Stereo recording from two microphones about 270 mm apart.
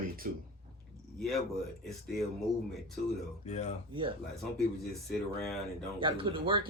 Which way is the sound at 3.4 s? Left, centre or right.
Left.